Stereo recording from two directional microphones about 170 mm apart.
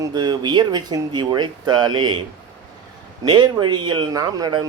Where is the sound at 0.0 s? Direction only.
25° right (ahead or behind).